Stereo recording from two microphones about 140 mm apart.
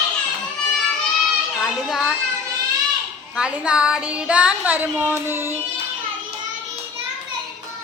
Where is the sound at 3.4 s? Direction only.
5° right (ahead or behind).